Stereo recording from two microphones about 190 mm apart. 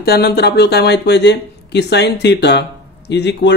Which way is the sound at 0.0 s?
55° left (ahead or behind).